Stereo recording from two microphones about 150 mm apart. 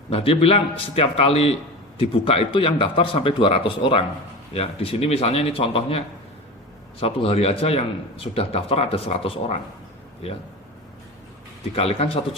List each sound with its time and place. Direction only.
0.1 s a man's voice: 40° left (ahead or behind)
7.0 s a man's voice: 40° left (ahead or behind)
11.7 s a man's voice: 40° left (ahead or behind)